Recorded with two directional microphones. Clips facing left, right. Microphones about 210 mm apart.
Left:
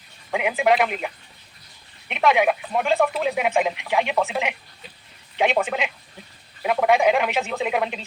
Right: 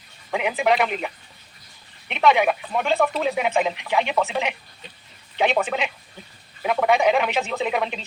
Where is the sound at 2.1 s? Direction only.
10° left (ahead or behind).